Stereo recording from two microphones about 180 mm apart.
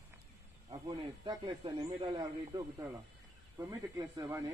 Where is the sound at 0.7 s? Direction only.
25° right (ahead or behind).